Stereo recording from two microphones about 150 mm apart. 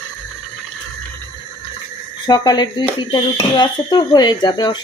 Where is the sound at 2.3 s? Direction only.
30° left (ahead or behind).